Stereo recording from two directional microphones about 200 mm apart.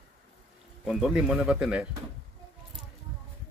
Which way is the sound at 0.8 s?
Centre (ahead or behind).